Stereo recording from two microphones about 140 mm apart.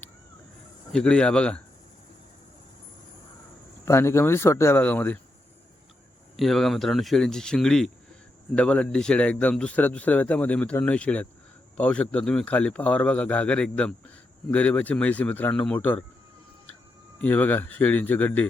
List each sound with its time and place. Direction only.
0.9 s a man's voice: 5° left (ahead or behind)
3.8 s a man's voice: 20° left (ahead or behind)
6.3 s a man's voice: centre (ahead or behind)
17.2 s a man's voice: 10° left (ahead or behind)